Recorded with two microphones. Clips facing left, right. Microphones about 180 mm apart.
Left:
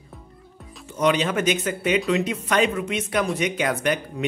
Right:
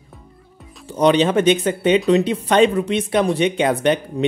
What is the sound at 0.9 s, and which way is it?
Speech, 30° right (ahead or behind).